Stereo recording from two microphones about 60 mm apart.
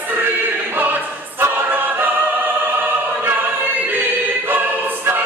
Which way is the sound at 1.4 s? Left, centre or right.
Right.